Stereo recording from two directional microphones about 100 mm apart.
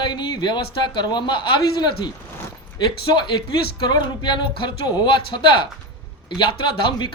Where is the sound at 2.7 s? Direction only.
45° left (ahead or behind).